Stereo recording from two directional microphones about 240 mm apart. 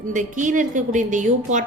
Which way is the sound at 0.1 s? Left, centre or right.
Right.